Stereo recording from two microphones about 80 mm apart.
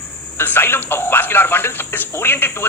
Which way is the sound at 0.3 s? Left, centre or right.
Left.